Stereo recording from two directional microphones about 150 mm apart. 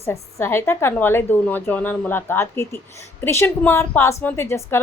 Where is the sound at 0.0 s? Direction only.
15° left (ahead or behind).